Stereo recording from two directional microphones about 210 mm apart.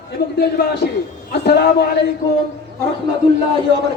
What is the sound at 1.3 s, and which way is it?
Speech, 50° left (ahead or behind).